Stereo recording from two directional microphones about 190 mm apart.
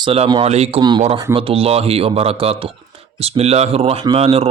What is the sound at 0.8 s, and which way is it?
Speech, 25° right (ahead or behind).